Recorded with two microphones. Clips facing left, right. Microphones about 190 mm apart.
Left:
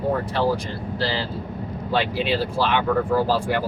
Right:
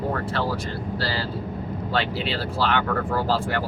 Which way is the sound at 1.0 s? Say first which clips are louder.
Left 4 dB; 20° left (ahead or behind).